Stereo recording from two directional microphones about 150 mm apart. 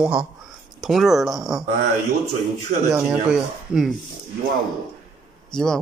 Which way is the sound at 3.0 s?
5° right (ahead or behind).